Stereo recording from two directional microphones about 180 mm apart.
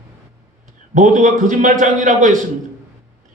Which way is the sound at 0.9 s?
45° right (ahead or behind).